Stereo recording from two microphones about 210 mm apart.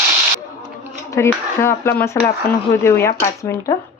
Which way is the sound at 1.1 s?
10° left (ahead or behind).